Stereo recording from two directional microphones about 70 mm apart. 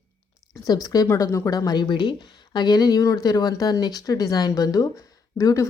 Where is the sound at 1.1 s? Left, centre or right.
Left.